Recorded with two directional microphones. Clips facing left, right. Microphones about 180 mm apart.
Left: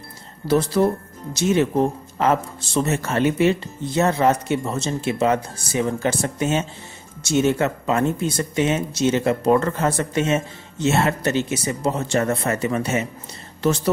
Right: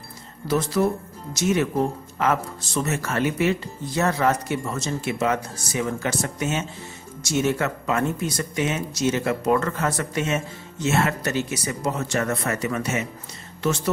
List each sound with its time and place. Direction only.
0.5 s speech: 30° left (ahead or behind)